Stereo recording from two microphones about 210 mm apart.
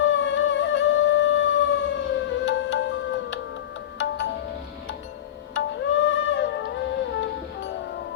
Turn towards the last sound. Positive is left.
turn(degrees=55)  # may be behind; listen again after turning